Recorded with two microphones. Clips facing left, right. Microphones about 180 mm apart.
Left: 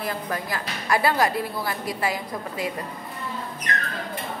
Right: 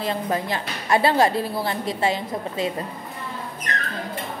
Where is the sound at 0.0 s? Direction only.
25° right (ahead or behind).